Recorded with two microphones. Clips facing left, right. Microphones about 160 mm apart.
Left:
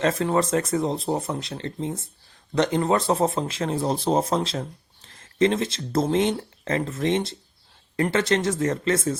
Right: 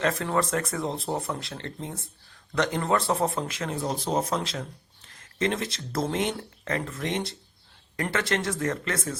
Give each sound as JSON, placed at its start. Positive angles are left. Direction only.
{"t": 0.0, "sound": "speech", "side_deg": 25}